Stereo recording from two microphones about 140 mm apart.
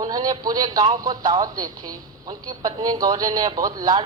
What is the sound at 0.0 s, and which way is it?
A man's voice, 30° right (ahead or behind).